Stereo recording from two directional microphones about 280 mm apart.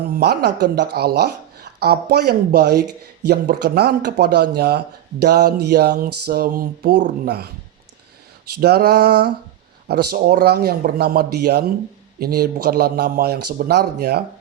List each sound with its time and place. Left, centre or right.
0.2 s speech: right
8.6 s speech: right